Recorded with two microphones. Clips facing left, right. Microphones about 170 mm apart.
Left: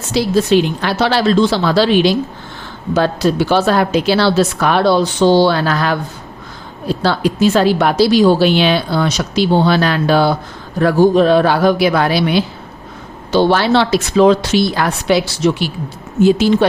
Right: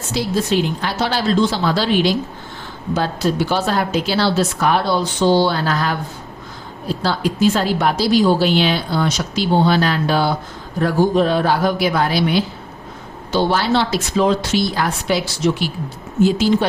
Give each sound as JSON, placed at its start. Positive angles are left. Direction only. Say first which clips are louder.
{"t": 0.1, "sound": "a woman's voice", "louder": "left 6 dB", "side_deg": 75}